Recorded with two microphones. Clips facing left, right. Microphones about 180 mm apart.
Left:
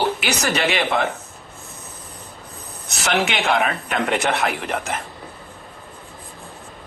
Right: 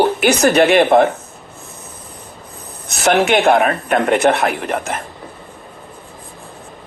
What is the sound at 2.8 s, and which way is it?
Speech, 50° right (ahead or behind).